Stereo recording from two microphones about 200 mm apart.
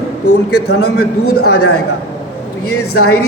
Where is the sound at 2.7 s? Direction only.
90° left.